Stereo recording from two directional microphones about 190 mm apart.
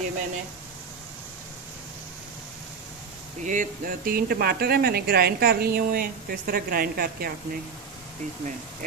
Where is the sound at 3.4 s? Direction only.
45° right (ahead or behind).